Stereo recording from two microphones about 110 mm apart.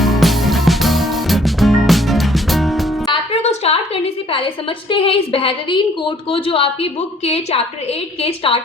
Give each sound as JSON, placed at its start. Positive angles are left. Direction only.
{"t": 0.0, "sound": "music", "side_deg": 0}
{"t": 3.6, "sound": "a sound", "side_deg": 65}
{"t": 4.9, "sound": "a woman's voice", "side_deg": 55}
{"t": 7.3, "sound": "a woman's voice", "side_deg": 65}